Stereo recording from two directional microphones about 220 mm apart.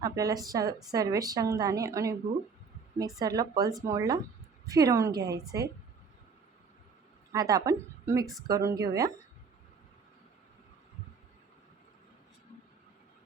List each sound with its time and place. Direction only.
0.0 s speech: 15° right (ahead or behind)
3.2 s speech: 15° right (ahead or behind)
5.1 s a woman's voice: 50° right (ahead or behind)
7.3 s a woman's voice: 15° right (ahead or behind)